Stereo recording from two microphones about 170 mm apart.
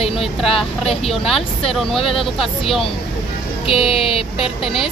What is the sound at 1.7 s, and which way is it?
Speech, centre (ahead or behind).